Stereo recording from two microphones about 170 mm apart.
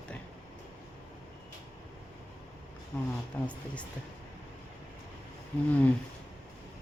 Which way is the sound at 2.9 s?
5° left (ahead or behind).